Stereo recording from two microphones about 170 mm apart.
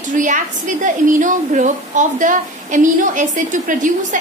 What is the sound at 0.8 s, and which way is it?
A woman's voice, 50° right (ahead or behind).